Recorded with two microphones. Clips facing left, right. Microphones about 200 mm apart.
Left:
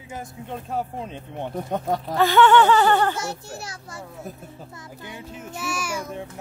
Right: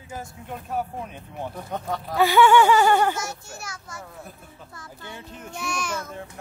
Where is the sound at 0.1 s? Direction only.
25° left (ahead or behind).